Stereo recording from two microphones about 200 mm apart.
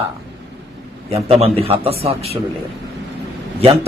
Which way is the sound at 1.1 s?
30° right (ahead or behind).